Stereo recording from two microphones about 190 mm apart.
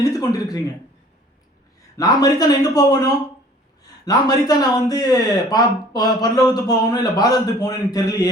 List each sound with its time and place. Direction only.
0.0 s speech: 20° left (ahead or behind)
2.0 s speech: 20° left (ahead or behind)